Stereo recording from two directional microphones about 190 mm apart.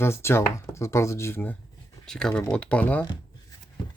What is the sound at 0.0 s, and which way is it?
Speech, 15° left (ahead or behind).